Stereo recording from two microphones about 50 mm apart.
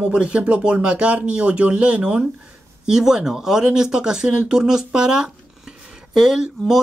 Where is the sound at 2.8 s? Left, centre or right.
Centre.